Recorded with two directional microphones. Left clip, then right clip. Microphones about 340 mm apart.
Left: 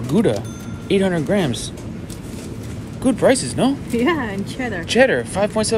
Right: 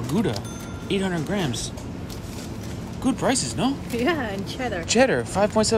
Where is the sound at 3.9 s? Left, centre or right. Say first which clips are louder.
Left 4 dB; centre.